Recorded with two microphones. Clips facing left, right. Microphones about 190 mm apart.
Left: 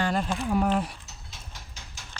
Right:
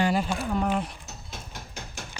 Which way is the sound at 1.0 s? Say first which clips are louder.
Right 6 dB; 55° right (ahead or behind).